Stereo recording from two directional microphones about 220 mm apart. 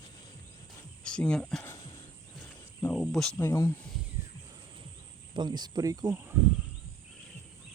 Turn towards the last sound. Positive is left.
turn(degrees=-10)  # may be behind; listen again after turning